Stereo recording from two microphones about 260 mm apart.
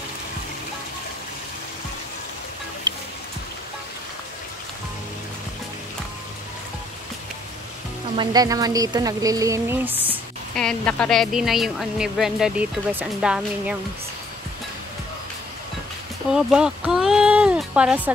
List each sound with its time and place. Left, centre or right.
2.9 s music: centre
8.2 s speech: centre
10.0 s speech: centre
16.3 s speech: centre